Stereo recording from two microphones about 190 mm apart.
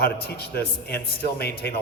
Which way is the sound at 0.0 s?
55° left (ahead or behind).